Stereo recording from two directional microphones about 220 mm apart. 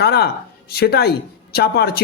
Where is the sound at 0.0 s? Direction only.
45° left (ahead or behind).